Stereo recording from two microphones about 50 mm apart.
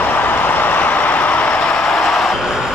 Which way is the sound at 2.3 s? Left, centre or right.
Centre.